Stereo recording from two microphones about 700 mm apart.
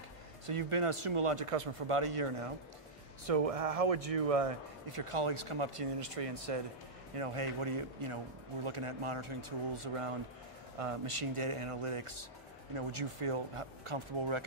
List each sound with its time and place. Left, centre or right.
0.5 s speech: right
10.8 s speech: right